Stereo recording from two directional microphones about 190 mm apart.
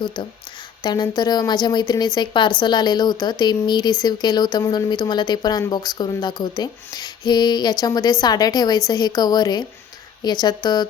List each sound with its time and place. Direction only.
0.8 s speech: 20° left (ahead or behind)